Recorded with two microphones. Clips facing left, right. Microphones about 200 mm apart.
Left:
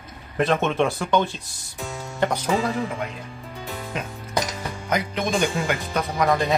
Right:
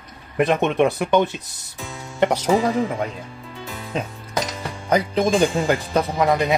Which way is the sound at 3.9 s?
30° right (ahead or behind).